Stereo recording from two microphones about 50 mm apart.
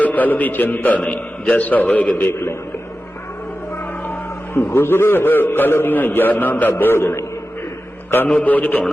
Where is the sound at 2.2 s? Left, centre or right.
Left.